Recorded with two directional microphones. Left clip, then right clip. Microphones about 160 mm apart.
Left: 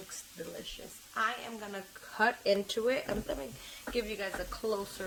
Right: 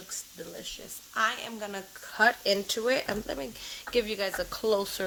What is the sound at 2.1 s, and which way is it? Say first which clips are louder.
Speech: right 4 dB; 30° right (ahead or behind).